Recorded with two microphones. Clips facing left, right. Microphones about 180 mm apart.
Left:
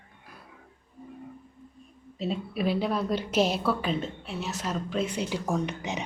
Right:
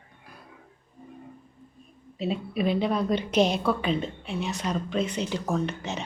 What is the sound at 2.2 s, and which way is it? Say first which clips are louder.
A woman's voice: right 2 dB; centre (ahead or behind).